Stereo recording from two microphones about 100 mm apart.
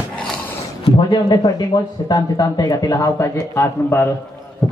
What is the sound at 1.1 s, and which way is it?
A man's voice, 50° left (ahead or behind).